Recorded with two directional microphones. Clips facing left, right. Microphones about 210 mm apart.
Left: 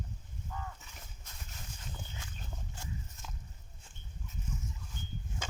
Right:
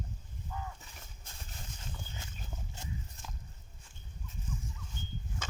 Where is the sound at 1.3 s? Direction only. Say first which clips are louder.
Right 2 dB; 30° right (ahead or behind).